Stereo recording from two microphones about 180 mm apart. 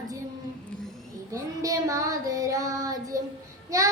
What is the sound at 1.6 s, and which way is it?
Child singing, 20° right (ahead or behind).